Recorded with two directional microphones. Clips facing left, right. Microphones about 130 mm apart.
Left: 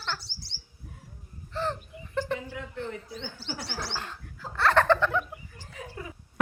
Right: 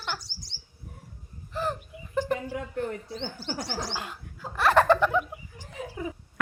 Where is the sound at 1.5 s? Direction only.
10° right (ahead or behind).